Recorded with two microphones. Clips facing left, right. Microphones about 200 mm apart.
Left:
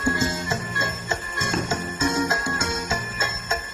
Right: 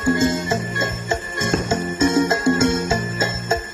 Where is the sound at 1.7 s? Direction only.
25° right (ahead or behind).